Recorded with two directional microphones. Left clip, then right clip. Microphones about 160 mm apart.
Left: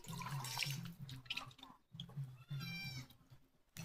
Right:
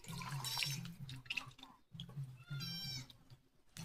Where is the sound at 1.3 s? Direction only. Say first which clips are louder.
Right 2 dB; 20° left (ahead or behind).